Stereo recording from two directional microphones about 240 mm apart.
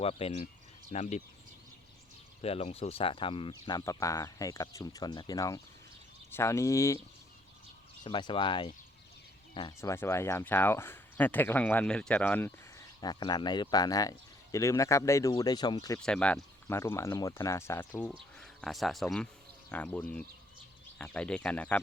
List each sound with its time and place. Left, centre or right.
0.0 s speech: left
2.4 s speech: left
8.0 s speech: centre
16.0 s speech: centre